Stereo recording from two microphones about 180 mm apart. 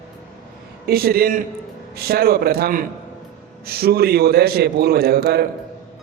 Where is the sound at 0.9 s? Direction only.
60° right (ahead or behind).